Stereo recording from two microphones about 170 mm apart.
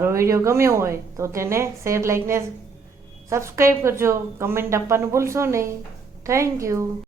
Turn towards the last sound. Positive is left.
turn(degrees=-15)  # may be behind; listen again after turning